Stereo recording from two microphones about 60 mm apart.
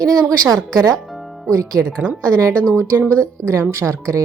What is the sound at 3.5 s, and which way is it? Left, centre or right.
Speech, right.